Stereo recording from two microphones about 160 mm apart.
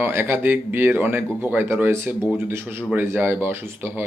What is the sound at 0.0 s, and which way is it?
Speech, 15° right (ahead or behind).